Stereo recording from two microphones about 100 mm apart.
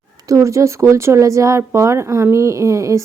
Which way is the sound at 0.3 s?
30° right (ahead or behind).